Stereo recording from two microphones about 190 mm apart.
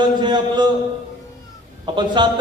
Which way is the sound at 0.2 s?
25° right (ahead or behind).